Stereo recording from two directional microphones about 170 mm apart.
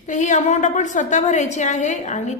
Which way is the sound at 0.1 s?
45° left (ahead or behind).